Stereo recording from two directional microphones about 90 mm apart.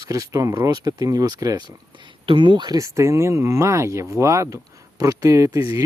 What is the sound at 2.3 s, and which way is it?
Speech, 65° right (ahead or behind).